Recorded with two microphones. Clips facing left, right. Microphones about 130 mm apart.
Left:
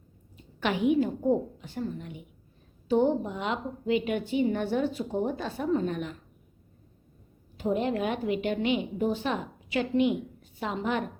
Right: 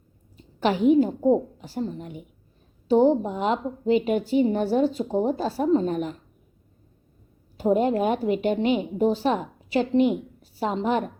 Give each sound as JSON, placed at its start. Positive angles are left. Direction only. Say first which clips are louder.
{"t": 0.3, "sound": "a woman's voice", "louder": "right 6 dB", "side_deg": -35}
{"t": 7.5, "sound": "a woman's voice", "louder": "right 6 dB", "side_deg": -40}